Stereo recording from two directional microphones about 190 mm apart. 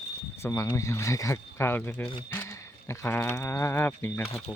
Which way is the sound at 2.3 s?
15° left (ahead or behind).